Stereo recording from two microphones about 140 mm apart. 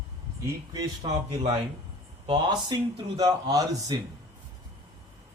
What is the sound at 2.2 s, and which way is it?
Speech, 30° right (ahead or behind).